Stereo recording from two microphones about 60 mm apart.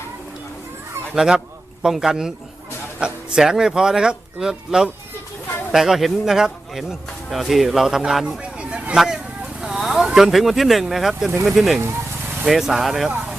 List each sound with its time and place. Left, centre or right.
1.1 s speech: centre
8.5 s a sound: centre
10.2 s speech: centre